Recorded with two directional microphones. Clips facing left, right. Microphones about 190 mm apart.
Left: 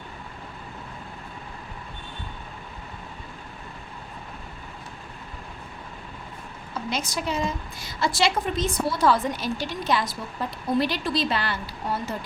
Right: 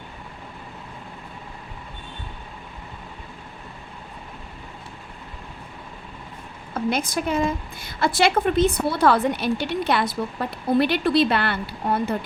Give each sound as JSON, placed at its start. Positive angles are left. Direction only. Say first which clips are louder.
{"t": 6.7, "sound": "a woman's voice", "louder": "right 6 dB", "side_deg": -55}